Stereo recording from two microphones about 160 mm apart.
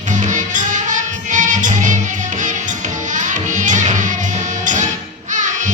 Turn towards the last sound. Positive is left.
turn(degrees=-50)  # may be behind; listen again after turning